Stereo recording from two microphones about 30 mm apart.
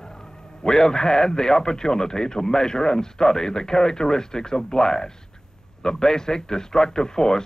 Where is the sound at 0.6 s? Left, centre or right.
Left.